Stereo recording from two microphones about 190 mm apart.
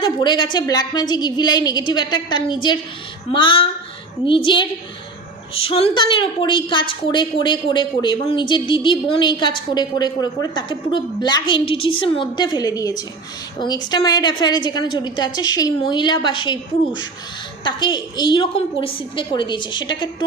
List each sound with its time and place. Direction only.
0.0 s a woman's voice: 25° left (ahead or behind)